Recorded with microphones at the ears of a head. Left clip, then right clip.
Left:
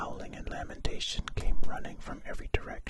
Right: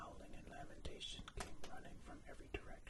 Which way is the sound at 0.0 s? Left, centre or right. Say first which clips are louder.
Left 17 dB; left.